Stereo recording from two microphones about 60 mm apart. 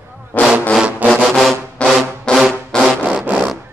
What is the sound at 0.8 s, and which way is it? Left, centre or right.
Music, right.